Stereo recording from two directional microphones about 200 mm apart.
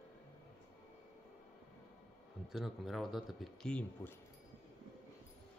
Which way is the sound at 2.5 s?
Centre (ahead or behind).